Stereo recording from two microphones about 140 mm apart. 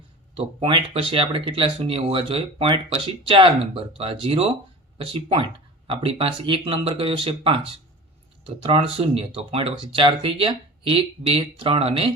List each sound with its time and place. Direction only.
0.3 s speech: 40° right (ahead or behind)